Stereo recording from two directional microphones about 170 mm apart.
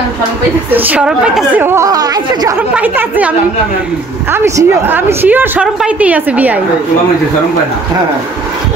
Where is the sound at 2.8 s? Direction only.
10° right (ahead or behind).